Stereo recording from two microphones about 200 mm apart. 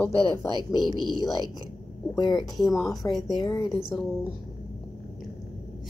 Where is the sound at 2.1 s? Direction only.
20° left (ahead or behind).